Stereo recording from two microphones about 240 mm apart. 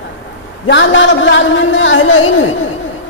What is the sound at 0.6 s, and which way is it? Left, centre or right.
A woman's voice, left.